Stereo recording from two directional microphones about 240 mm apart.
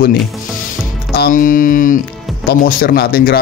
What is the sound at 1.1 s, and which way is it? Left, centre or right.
Speech, left.